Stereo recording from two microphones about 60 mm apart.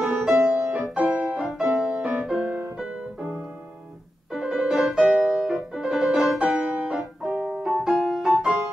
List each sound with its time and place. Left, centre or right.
0.0 s music: centre
2.4 s music: right
4.3 s music: centre